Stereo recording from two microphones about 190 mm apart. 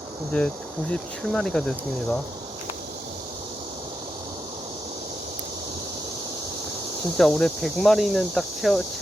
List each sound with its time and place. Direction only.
0.3 s cricket: 5° left (ahead or behind)
7.2 s cricket: 5° left (ahead or behind)